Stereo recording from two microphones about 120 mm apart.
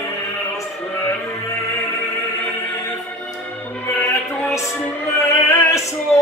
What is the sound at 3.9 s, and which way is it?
Music, 25° left (ahead or behind).